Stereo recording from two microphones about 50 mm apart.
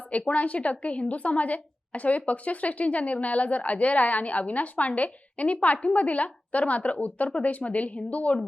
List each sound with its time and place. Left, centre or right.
0.1 s a woman's voice: left